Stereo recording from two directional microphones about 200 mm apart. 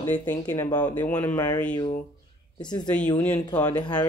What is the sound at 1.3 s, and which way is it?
Speech, 20° left (ahead or behind).